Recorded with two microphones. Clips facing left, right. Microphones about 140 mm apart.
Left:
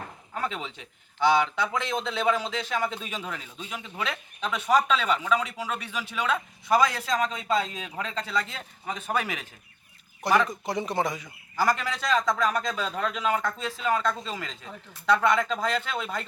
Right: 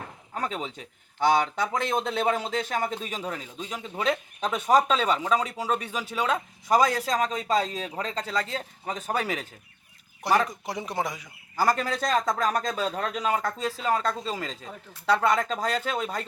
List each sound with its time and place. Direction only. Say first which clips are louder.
0.3 s speech: right 1 dB; 40° right (ahead or behind)
10.2 s a man's voice: even; 10° right (ahead or behind)
11.5 s speech: right 1 dB; 35° right (ahead or behind)